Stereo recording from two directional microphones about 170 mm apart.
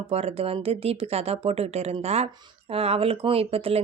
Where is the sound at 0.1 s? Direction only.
35° right (ahead or behind).